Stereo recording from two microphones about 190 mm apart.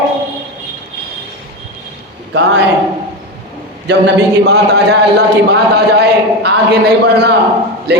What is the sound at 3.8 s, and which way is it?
A man's voice, 60° right (ahead or behind).